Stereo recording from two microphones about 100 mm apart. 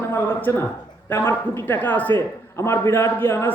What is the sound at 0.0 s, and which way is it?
A man's voice, 20° left (ahead or behind).